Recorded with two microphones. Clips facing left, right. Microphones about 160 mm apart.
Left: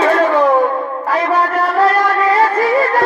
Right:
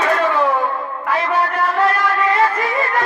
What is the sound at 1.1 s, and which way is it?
Music, 35° left (ahead or behind).